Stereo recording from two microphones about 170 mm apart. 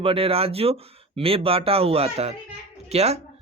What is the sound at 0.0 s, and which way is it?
Speech, 35° right (ahead or behind).